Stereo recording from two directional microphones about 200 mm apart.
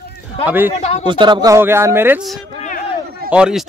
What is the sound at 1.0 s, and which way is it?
Speech, 25° right (ahead or behind).